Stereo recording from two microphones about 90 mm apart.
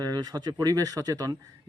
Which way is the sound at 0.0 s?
50° right (ahead or behind).